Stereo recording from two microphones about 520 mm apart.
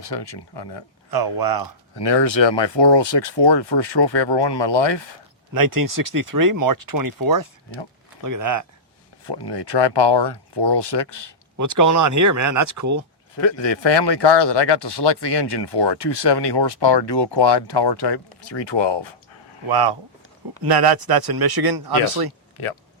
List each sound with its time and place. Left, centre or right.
0.1 s speech: left
1.1 s speech: right
2.5 s speech: left
5.5 s speech: right
9.2 s speech: left
11.5 s speech: right
13.3 s speech: left
19.6 s speech: right